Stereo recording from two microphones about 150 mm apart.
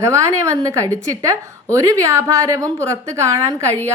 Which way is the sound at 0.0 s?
20° right (ahead or behind).